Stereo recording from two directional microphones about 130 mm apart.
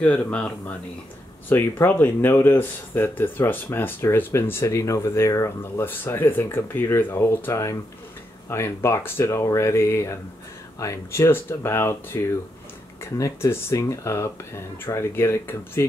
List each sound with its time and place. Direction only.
0.0 s speech: 10° left (ahead or behind)